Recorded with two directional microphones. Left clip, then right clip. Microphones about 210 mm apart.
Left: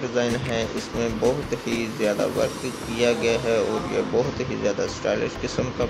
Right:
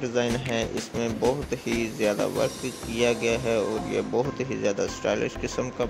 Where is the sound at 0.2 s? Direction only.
35° right (ahead or behind).